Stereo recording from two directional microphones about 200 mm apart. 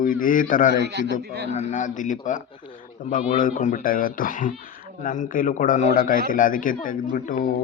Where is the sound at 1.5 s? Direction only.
35° left (ahead or behind).